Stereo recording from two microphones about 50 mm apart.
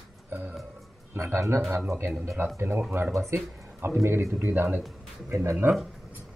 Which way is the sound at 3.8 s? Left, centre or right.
Right.